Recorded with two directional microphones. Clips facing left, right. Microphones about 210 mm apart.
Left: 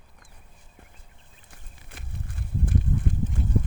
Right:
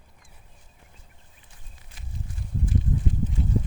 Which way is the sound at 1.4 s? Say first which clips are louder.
Left 6 dB; 60° left (ahead or behind).